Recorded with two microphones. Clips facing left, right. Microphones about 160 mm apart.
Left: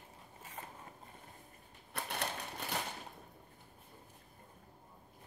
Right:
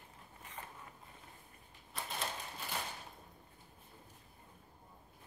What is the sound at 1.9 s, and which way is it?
Typewriter, 65° left (ahead or behind).